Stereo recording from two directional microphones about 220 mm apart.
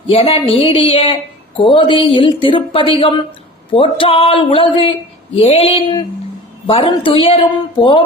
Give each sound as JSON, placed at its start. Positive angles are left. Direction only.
{"t": 0.1, "sound": "speech", "side_deg": 25}